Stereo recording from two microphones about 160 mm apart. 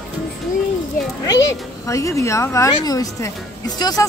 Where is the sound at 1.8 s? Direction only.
20° left (ahead or behind).